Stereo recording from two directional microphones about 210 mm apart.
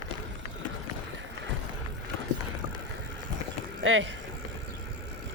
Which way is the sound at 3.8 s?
65° right (ahead or behind).